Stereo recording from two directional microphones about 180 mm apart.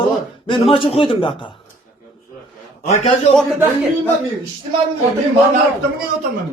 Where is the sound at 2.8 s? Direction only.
40° left (ahead or behind).